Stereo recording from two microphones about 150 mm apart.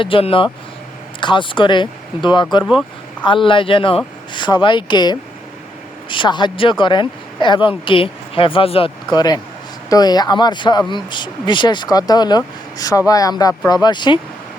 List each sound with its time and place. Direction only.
0.0 s speech: 35° left (ahead or behind)